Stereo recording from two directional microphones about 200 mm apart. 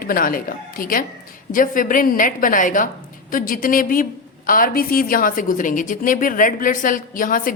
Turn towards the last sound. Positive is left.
turn(degrees=45)  # may be behind; listen again after turning